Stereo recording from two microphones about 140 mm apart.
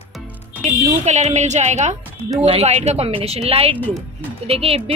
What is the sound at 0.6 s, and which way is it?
Speech, 55° right (ahead or behind).